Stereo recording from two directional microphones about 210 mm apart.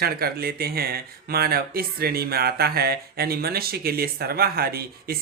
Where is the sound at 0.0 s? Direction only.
45° right (ahead or behind).